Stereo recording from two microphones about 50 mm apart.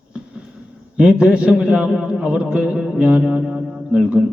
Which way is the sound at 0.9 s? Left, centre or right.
Right.